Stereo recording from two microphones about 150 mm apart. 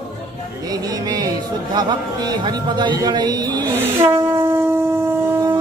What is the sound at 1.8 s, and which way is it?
Speech, 30° right (ahead or behind).